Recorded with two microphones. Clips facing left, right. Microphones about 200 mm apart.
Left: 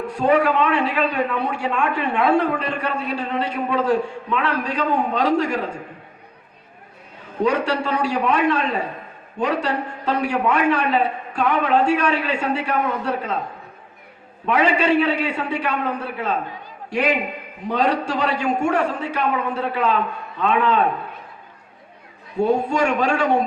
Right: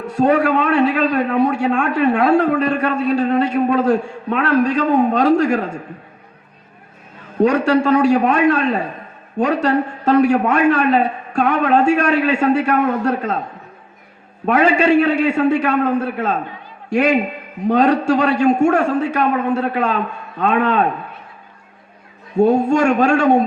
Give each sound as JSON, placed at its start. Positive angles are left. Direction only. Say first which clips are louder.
{"t": 0.2, "sound": "a man's voice", "louder": "right 3 dB", "side_deg": -45}
{"t": 7.4, "sound": "a man's voice", "louder": "right 6 dB", "side_deg": -45}
{"t": 14.4, "sound": "a man's voice", "louder": "right 4 dB", "side_deg": -45}
{"t": 22.4, "sound": "a man's voice", "louder": "right 5 dB", "side_deg": -45}